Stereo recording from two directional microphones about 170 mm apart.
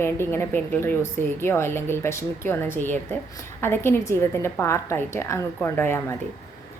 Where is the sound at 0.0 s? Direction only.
15° left (ahead or behind).